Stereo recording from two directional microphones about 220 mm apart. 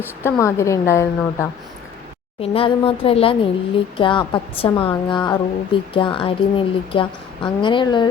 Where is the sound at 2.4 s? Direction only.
25° left (ahead or behind).